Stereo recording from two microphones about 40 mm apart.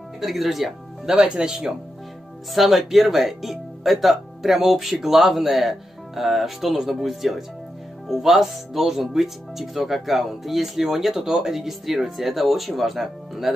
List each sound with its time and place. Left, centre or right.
0.2 s speech: centre
1.2 s speech: right
2.5 s speech: centre